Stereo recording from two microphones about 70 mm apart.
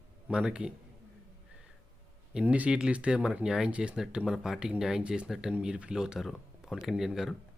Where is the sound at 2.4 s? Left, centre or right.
Centre.